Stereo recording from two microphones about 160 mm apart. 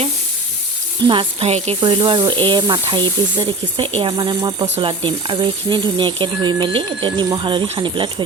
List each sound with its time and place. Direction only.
1.0 s speech: 30° right (ahead or behind)